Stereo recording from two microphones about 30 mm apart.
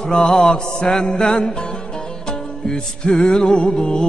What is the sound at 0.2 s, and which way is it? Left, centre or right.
Mantra, centre.